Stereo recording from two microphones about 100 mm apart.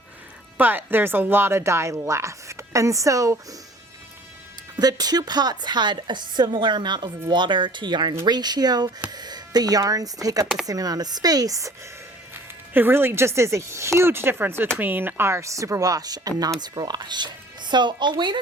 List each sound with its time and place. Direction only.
0.5 s speech: 20° right (ahead or behind)
4.8 s a woman's voice: 40° right (ahead or behind)
12.3 s speech: 20° right (ahead or behind); by 18.3 s 50° right (ahead or behind)